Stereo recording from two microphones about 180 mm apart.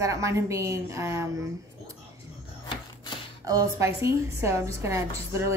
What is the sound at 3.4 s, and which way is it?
A woman's voice, 20° right (ahead or behind).